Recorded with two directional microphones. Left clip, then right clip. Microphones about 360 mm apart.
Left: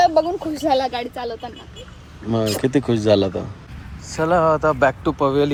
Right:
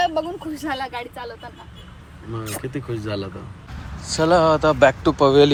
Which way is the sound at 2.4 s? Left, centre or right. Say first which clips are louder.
Left 11 dB; centre.